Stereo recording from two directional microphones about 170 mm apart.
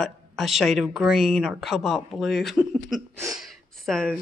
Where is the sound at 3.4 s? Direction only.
Centre (ahead or behind).